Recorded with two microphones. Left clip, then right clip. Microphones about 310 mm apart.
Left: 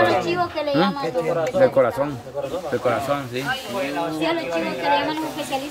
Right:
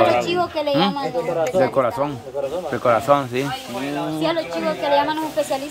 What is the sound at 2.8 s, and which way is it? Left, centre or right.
Speech, centre.